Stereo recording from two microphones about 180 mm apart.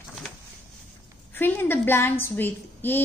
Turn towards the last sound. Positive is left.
turn(degrees=10)  # may be behind; listen again after turning